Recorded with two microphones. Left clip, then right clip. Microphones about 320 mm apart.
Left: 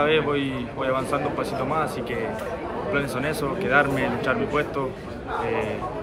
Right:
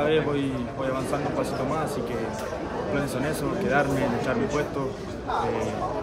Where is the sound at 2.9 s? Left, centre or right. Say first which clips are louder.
Left 3 dB; centre.